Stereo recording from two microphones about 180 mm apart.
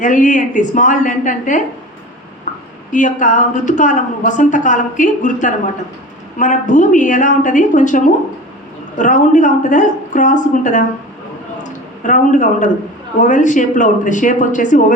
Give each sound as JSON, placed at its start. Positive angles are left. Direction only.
{"t": 0.0, "sound": "a woman's voice", "side_deg": 45}
{"t": 2.9, "sound": "a woman's voice", "side_deg": 45}
{"t": 11.6, "sound": "a sound", "side_deg": 45}
{"t": 13.2, "sound": "a woman's voice", "side_deg": 45}